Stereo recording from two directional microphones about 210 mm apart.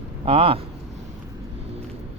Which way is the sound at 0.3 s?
25° right (ahead or behind).